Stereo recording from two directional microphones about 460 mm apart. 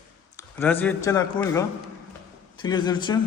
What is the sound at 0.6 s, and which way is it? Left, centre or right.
A man's voice, centre.